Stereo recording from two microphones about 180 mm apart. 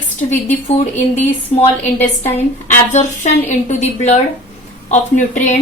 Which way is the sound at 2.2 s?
40° left (ahead or behind).